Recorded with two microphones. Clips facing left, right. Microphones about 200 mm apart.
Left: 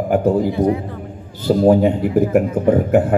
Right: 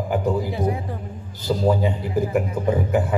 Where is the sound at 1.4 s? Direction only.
60° left (ahead or behind).